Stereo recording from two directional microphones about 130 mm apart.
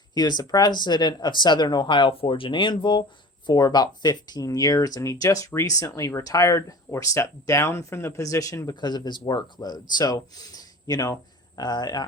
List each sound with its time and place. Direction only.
0.1 s speech: 30° left (ahead or behind)